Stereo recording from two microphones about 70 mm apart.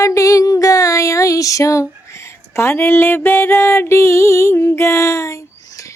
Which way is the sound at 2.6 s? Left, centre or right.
Left.